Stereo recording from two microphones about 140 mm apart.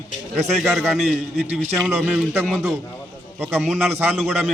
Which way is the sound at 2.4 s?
5° left (ahead or behind).